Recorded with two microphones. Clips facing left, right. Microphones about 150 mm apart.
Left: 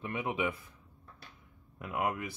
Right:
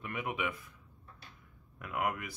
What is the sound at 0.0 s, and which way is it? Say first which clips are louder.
Speech: left 3 dB; 25° left (ahead or behind).